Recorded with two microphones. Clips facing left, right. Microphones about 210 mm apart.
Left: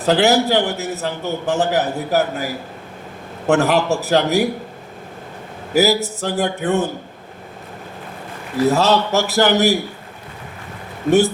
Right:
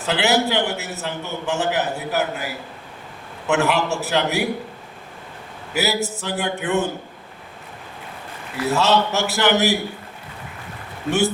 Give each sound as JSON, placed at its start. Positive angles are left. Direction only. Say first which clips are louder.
{"t": 0.0, "sound": "a man's voice", "louder": "left 5 dB", "side_deg": 35}
{"t": 5.7, "sound": "a man's voice", "louder": "left 7 dB", "side_deg": 40}
{"t": 8.5, "sound": "a man's voice", "louder": "left 4 dB", "side_deg": 35}